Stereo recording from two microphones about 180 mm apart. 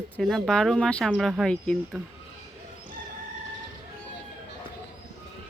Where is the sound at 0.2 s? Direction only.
Centre (ahead or behind).